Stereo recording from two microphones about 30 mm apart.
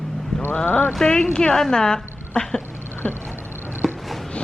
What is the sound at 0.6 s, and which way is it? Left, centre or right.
Speech, left.